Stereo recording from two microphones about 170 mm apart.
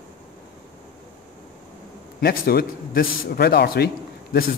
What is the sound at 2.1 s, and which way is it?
A man's voice, 65° left (ahead or behind).